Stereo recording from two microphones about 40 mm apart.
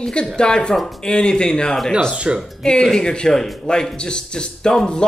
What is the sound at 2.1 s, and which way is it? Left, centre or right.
Speech, right.